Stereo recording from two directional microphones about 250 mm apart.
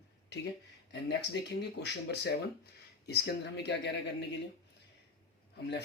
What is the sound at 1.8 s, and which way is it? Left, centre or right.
Speech, left.